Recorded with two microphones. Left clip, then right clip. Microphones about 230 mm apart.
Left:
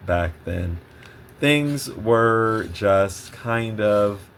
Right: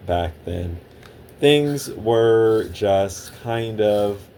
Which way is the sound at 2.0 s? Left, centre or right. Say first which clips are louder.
Right 2 dB; left.